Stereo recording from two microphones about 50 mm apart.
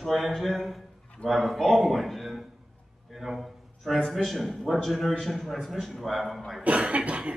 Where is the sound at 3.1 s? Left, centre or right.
Centre.